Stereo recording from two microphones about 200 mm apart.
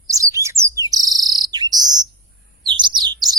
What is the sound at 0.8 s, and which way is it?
Bird, 20° right (ahead or behind).